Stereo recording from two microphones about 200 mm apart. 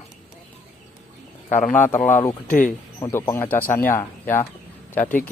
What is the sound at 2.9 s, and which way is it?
Speech, 10° left (ahead or behind).